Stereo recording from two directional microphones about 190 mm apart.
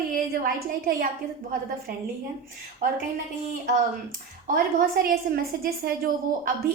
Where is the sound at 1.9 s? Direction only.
50° right (ahead or behind).